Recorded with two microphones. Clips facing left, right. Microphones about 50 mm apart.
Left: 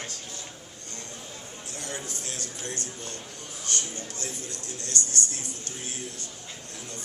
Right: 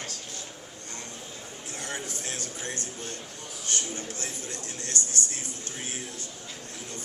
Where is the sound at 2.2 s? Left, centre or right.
Right.